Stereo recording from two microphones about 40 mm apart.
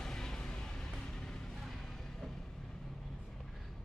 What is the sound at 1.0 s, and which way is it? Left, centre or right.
Music, centre.